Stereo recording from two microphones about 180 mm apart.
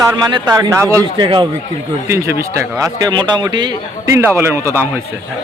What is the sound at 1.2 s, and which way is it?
Speech, 25° right (ahead or behind).